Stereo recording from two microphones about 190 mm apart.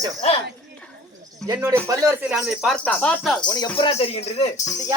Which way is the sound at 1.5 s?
15° right (ahead or behind).